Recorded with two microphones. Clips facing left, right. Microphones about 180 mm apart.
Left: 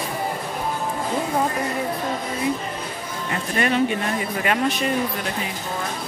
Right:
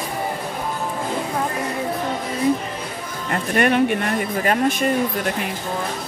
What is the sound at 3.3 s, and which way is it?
Speech, 55° right (ahead or behind).